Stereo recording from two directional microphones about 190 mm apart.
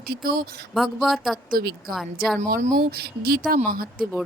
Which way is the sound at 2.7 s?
50° right (ahead or behind).